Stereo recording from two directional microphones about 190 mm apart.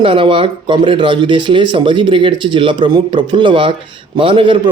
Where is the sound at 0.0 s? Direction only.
25° right (ahead or behind).